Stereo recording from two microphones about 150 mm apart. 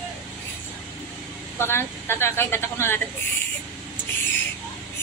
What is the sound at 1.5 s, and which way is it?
Speech, 15° left (ahead or behind).